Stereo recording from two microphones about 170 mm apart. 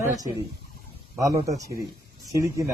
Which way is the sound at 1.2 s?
20° right (ahead or behind).